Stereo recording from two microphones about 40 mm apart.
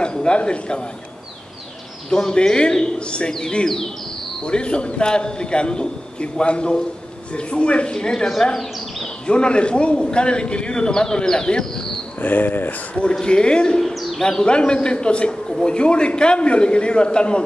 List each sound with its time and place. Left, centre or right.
0.0 s a man's voice: left
2.0 s a man's voice: centre
3.6 s speech: centre
4.5 s a man's voice: left
9.3 s a man's voice: left
12.2 s speech: left
13.2 s a man's voice: left
13.7 s speech: centre
14.2 s a man's voice: left